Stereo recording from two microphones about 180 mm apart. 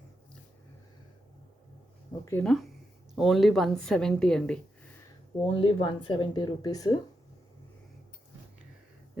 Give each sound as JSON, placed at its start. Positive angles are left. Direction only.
{"t": 2.4, "sound": "a woman's voice", "side_deg": 0}
{"t": 5.4, "sound": "speech", "side_deg": 30}